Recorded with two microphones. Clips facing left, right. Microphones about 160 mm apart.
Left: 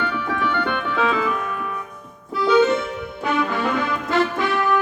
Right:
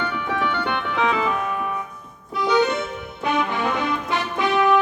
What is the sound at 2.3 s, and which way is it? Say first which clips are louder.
Music: left 3 dB; 20° right (ahead or behind).